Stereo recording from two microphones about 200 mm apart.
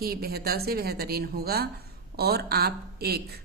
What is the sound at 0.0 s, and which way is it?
Speech, 50° right (ahead or behind).